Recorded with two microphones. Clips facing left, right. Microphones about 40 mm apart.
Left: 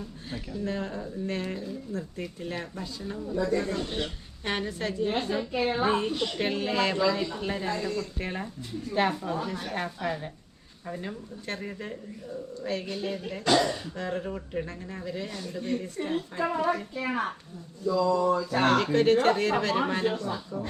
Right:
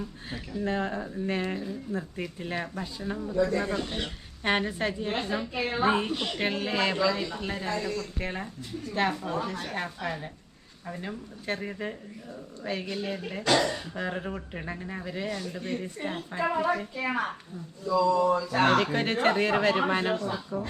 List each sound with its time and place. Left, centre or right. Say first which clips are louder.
0.6 s speech: right 4 dB; right
3.8 s speech: left 1 dB; centre
4.4 s speech: right 4 dB; right